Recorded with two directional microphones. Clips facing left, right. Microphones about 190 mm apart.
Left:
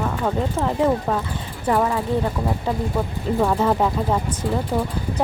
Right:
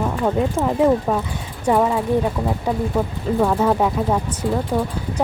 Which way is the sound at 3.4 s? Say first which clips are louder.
Right 2 dB; centre (ahead or behind).